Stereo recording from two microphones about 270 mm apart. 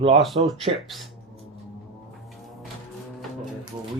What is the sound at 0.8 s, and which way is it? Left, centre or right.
Speech, centre.